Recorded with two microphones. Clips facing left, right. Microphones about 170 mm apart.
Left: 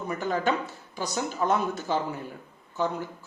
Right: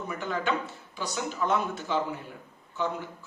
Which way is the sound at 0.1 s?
40° left (ahead or behind).